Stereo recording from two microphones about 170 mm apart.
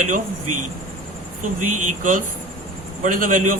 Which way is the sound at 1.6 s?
50° right (ahead or behind).